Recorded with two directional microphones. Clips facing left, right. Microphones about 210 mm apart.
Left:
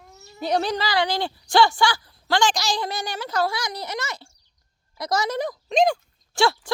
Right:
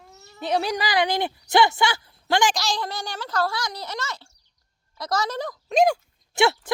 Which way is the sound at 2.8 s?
15° left (ahead or behind).